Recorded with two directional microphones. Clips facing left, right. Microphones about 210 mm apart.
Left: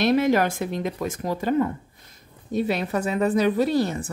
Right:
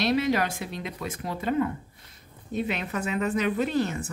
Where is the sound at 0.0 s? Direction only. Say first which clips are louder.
Left 5 dB; 50° left (ahead or behind).